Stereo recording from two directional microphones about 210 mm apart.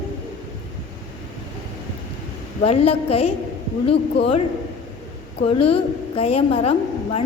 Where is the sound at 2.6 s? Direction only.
30° left (ahead or behind).